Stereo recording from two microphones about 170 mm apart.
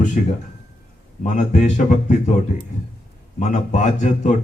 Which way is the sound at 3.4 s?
45° left (ahead or behind).